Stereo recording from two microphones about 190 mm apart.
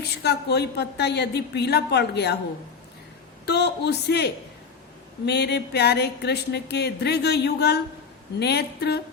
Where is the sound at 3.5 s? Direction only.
60° left (ahead or behind).